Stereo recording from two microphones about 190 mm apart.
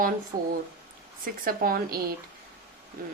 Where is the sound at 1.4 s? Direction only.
50° right (ahead or behind).